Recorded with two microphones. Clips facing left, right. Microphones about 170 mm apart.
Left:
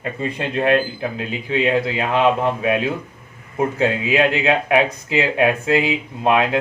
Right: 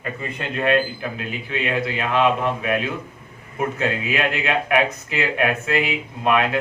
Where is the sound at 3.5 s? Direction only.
30° left (ahead or behind).